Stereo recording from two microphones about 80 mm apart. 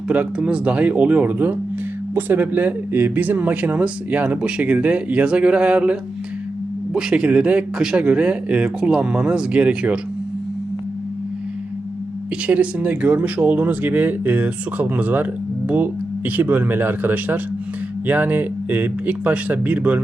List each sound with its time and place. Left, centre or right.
0.1 s speech: centre
12.5 s speech: centre